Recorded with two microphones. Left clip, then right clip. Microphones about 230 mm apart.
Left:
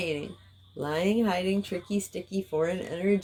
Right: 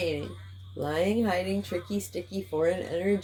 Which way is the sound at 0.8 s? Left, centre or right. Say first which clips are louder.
Even; left.